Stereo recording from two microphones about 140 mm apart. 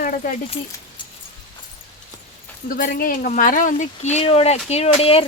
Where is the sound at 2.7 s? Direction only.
85° left; by 5.3 s 45° left (ahead or behind).